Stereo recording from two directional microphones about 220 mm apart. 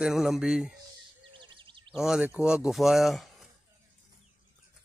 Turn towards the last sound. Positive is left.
turn(degrees=0)  # may be behind; listen again after turning